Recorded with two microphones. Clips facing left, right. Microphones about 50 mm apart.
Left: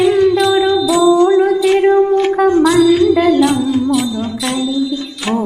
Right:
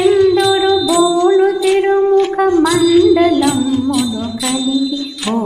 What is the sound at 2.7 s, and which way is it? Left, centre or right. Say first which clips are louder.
Music: even; left.